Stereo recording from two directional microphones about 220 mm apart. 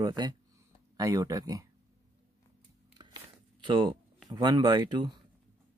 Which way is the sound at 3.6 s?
20° right (ahead or behind).